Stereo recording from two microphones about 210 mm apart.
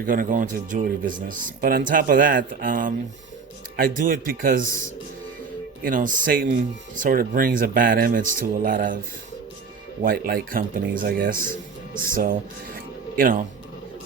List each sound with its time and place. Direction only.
0.0 s speech: 40° right (ahead or behind)
5.8 s speech: 40° right (ahead or behind)
10.0 s speech: 45° right (ahead or behind)